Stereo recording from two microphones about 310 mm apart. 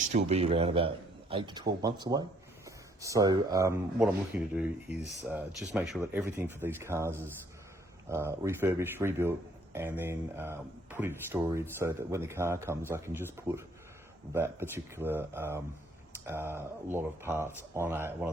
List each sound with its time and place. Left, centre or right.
0.1 s speech: right